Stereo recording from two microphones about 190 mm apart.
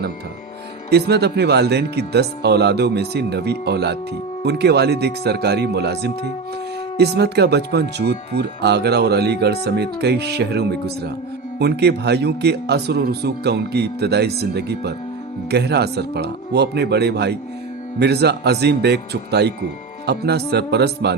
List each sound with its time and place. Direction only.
0.9 s speech: 60° right (ahead or behind)